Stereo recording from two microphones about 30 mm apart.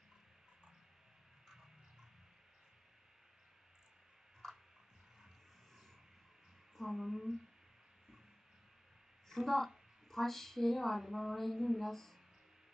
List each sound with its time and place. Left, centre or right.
4.4 s tick-tock: centre
6.7 s speech: centre
9.3 s a woman's voice: centre
10.1 s a sound: centre
11.8 s speech: centre